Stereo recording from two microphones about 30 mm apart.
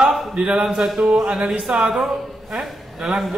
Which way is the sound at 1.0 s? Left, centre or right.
Right.